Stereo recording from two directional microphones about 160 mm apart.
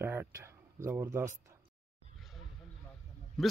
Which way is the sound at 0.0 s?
15° right (ahead or behind).